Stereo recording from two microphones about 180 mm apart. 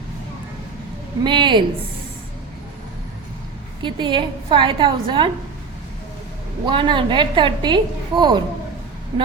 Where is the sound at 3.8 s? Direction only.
25° right (ahead or behind).